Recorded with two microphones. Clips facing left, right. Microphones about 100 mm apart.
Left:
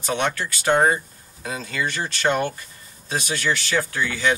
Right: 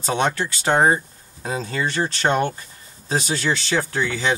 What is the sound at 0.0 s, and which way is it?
Speech, 30° right (ahead or behind).